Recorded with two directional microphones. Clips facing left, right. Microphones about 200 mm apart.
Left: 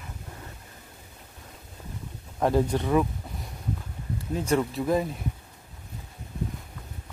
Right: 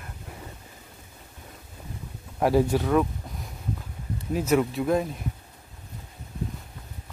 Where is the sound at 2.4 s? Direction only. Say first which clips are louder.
Right 2 dB; 5° right (ahead or behind).